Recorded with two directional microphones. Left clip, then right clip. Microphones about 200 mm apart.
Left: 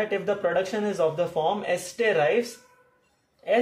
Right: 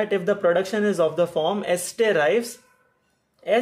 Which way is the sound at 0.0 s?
55° right (ahead or behind).